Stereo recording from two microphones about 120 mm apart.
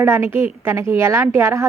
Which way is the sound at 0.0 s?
20° right (ahead or behind).